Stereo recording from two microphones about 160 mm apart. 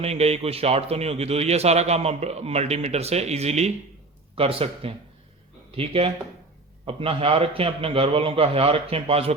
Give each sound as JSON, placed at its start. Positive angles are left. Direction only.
{"t": 0.0, "sound": "a man's voice", "side_deg": -40}